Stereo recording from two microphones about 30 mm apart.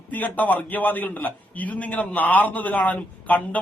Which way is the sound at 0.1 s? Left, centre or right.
Left.